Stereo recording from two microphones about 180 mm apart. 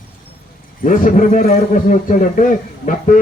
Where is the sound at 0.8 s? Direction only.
50° left (ahead or behind).